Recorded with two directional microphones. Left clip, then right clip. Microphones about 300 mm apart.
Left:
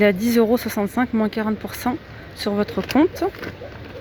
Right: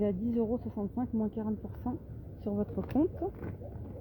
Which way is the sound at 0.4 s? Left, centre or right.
Left.